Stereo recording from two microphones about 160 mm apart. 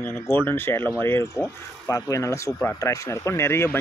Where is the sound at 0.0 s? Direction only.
15° left (ahead or behind).